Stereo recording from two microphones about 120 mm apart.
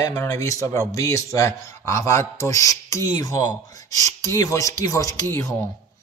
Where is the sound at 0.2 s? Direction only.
25° left (ahead or behind).